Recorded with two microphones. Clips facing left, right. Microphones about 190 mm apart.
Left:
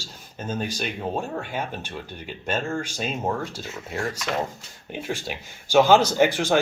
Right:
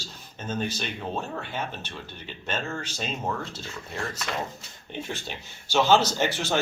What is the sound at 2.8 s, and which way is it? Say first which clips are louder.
Speech: left 4 dB; 10° left (ahead or behind).